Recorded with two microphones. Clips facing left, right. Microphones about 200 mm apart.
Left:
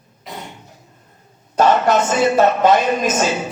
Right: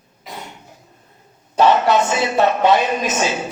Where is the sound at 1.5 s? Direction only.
45° left (ahead or behind).